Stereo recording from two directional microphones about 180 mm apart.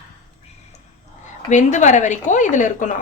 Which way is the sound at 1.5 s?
45° left (ahead or behind).